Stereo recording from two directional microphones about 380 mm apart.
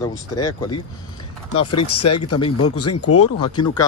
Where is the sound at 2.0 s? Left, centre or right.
Left.